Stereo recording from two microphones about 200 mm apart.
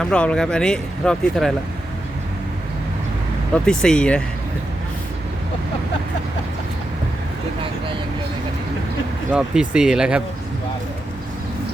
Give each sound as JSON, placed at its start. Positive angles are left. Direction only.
{"t": 0.0, "sound": "speech", "side_deg": 5}
{"t": 3.5, "sound": "speech", "side_deg": 5}
{"t": 9.3, "sound": "speech", "side_deg": -5}